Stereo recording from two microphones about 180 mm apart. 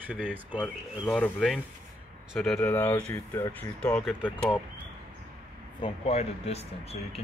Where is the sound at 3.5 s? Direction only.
10° left (ahead or behind).